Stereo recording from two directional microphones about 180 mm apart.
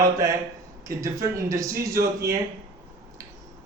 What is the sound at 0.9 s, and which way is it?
A man's voice, 20° right (ahead or behind).